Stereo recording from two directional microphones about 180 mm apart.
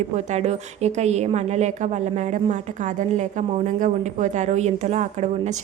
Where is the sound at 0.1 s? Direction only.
40° right (ahead or behind).